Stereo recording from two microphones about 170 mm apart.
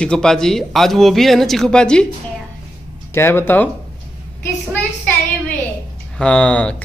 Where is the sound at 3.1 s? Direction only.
15° left (ahead or behind).